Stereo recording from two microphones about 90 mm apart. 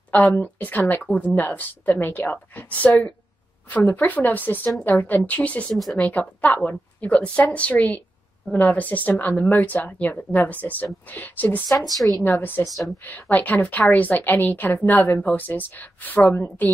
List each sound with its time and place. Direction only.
0.4 s a woman's voice: 20° left (ahead or behind)
5.7 s speech: centre (ahead or behind)
6.0 s a woman's voice: 15° left (ahead or behind)
11.7 s speech: centre (ahead or behind)
12.2 s speech: 20° left (ahead or behind)